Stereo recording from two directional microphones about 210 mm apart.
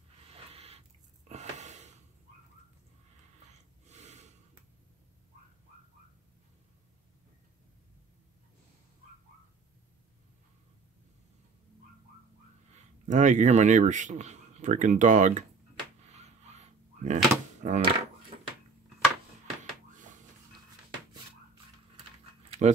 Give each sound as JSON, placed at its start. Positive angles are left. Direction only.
{"t": 0.3, "sound": "a sound", "side_deg": -30}
{"t": 1.3, "sound": "gasp", "side_deg": -35}
{"t": 3.8, "sound": "gasp", "side_deg": -35}
{"t": 12.7, "sound": "speech", "side_deg": -35}
{"t": 16.0, "sound": "door", "side_deg": -30}